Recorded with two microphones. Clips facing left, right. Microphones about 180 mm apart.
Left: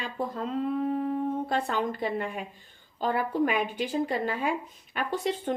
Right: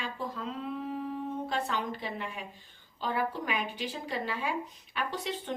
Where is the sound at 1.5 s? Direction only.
50° left (ahead or behind).